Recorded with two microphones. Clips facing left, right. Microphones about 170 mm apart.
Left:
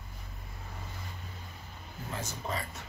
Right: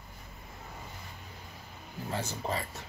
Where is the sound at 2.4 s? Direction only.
30° right (ahead or behind).